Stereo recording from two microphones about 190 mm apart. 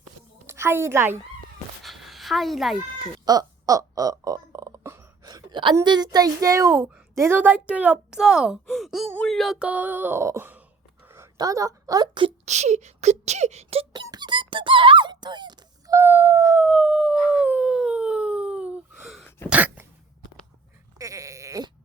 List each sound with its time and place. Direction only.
0.4 s a woman's voice: 15° right (ahead or behind)
1.8 s a sound: centre (ahead or behind)
3.2 s speech: 20° right (ahead or behind)
11.0 s a sound: 15° right (ahead or behind)
12.5 s speech: 35° right (ahead or behind)
14.1 s squeak: 25° right (ahead or behind); by 19.3 s centre (ahead or behind)
19.5 s cough: 10° right (ahead or behind)
21.0 s sheep: 15° right (ahead or behind)